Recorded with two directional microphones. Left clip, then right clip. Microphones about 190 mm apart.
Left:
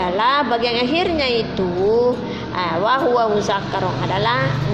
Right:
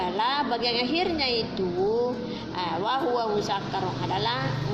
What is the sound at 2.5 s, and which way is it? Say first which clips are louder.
A woman's voice: left 9 dB; 30° left (ahead or behind).